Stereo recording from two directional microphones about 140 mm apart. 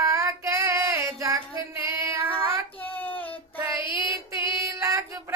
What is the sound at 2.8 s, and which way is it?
Child singing, 15° left (ahead or behind).